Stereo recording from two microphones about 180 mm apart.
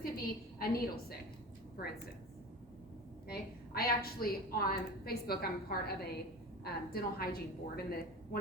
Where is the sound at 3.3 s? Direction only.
55° left (ahead or behind).